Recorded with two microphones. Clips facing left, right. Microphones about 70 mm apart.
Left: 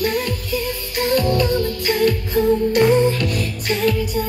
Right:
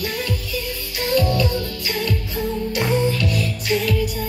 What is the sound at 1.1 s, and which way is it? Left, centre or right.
Music, left.